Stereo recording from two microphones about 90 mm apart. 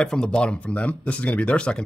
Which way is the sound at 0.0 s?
10° left (ahead or behind).